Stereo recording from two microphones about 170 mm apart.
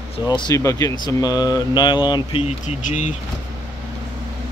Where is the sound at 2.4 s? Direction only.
45° left (ahead or behind).